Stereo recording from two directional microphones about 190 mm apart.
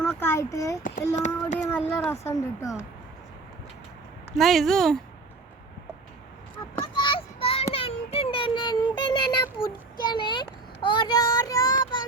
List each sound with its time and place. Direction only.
0.0 s a sound: 10° left (ahead or behind)
0.8 s child singing: 45° left (ahead or behind)
1.7 s speech: 10° left (ahead or behind)
4.3 s speech: centre (ahead or behind)
6.7 s child singing: 25° left (ahead or behind)
10.0 s speech: 25° left (ahead or behind)